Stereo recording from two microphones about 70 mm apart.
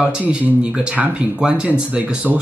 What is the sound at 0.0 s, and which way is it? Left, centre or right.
Speech, centre.